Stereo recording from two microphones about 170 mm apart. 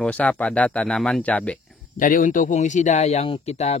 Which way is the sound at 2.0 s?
50° left (ahead or behind).